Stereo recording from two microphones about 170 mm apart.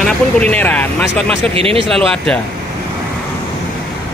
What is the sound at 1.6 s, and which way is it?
Speech, 35° right (ahead or behind).